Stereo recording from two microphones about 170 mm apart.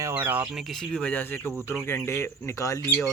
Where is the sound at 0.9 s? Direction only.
10° left (ahead or behind).